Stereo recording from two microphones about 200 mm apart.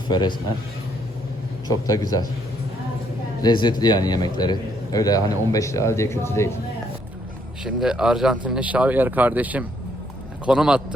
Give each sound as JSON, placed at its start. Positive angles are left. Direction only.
{"t": 0.1, "sound": "speech", "side_deg": 20}
{"t": 1.9, "sound": "a man's voice", "side_deg": 20}
{"t": 3.4, "sound": "a man's voice", "side_deg": 20}
{"t": 7.6, "sound": "speech", "side_deg": -5}